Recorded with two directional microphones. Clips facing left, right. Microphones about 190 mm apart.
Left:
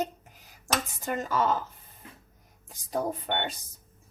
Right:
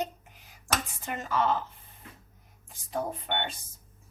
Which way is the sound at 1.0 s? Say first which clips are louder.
Left 1 dB; 40° left (ahead or behind).